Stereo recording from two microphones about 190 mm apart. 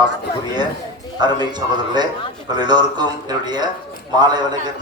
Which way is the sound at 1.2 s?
20° right (ahead or behind).